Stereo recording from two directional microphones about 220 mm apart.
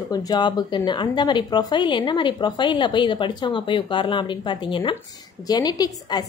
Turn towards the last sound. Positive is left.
turn(degrees=20)  # may be behind; listen again after turning